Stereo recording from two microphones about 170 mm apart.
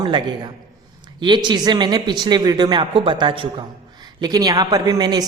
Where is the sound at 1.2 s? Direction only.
25° right (ahead or behind).